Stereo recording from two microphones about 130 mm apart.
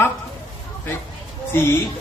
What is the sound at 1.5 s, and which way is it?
Speech, 20° left (ahead or behind).